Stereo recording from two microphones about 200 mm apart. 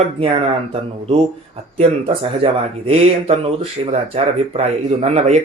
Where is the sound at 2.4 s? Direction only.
30° right (ahead or behind).